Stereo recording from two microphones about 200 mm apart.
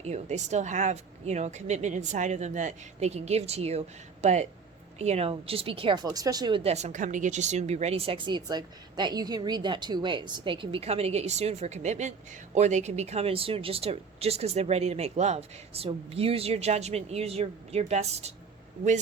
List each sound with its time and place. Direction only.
0.0 s speech: 35° right (ahead or behind)